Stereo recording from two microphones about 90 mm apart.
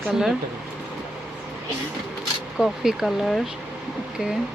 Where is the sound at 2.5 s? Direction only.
5° right (ahead or behind).